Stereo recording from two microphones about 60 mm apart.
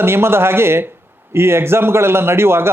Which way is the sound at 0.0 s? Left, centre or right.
Right.